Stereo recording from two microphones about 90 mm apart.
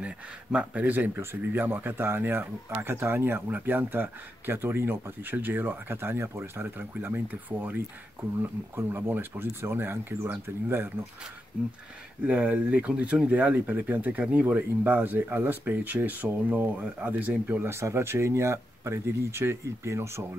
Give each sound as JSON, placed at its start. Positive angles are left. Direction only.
{"t": 0.0, "sound": "speech", "side_deg": -15}
{"t": 12.3, "sound": "speech", "side_deg": -15}
{"t": 17.6, "sound": "speech", "side_deg": -30}